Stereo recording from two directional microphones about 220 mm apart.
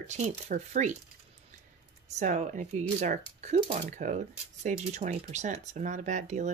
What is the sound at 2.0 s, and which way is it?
Speech, 30° right (ahead or behind).